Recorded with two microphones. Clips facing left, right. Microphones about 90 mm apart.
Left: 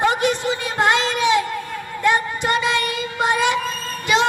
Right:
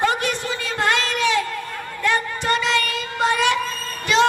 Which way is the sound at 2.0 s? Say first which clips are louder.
Left 2 dB; 15° left (ahead or behind).